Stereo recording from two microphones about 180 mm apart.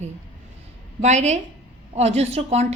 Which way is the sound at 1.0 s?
40° right (ahead or behind).